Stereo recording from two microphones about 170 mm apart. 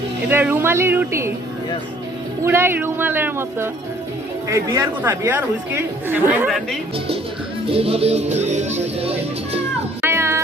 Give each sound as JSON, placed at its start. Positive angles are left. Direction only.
{"t": 0.3, "sound": "speech", "side_deg": -10}
{"t": 2.4, "sound": "speech", "side_deg": -15}
{"t": 7.7, "sound": "speech", "side_deg": -35}
{"t": 10.0, "sound": "music", "side_deg": -15}